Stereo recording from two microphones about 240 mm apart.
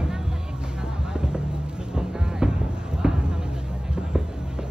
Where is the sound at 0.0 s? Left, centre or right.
Centre.